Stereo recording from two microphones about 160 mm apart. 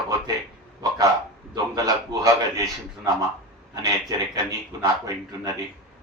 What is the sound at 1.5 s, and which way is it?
A man's voice, 25° right (ahead or behind).